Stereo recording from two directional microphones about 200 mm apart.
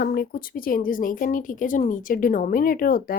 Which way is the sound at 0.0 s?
50° left (ahead or behind).